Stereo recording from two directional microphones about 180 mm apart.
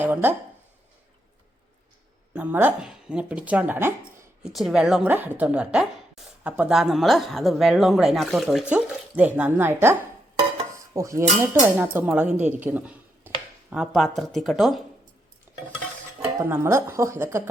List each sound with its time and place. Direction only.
0.0 s speech: 10° right (ahead or behind)
2.3 s speech: 10° right (ahead or behind)
4.5 s speech: centre (ahead or behind)
10.9 s a woman's voice: 15° right (ahead or behind); by 14.8 s centre (ahead or behind)
15.5 s stir: 10° right (ahead or behind)
16.5 s a woman's voice: 15° right (ahead or behind)